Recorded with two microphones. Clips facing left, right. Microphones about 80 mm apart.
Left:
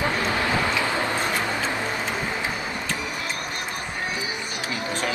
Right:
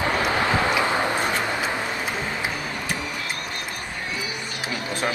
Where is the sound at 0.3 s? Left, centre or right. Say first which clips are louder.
Right 2 dB; right.